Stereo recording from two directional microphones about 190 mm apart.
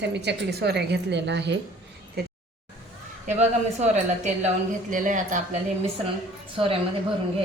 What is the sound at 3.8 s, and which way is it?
A woman's voice, 35° right (ahead or behind).